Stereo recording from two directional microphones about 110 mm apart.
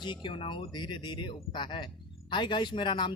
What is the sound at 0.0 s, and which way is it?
Speech, 45° left (ahead or behind).